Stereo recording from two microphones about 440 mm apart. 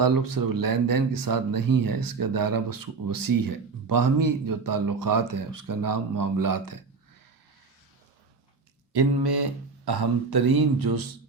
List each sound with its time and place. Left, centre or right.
0.0 s speech: right
8.9 s speech: right